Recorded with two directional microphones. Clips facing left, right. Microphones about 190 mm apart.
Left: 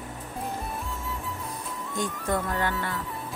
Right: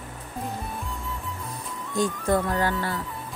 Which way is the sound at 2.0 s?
35° right (ahead or behind).